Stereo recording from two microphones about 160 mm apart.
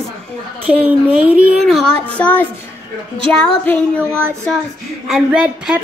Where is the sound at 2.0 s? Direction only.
10° left (ahead or behind).